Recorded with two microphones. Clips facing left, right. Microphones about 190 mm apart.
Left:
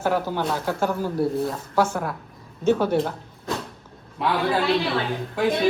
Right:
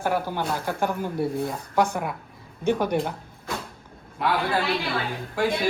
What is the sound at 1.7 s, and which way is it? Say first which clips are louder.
A man's voice: even; 15° right (ahead or behind).